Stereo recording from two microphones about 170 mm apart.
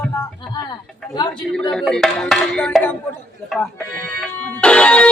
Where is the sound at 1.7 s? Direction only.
5° left (ahead or behind).